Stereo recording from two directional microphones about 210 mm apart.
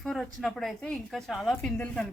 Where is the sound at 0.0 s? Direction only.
Centre (ahead or behind).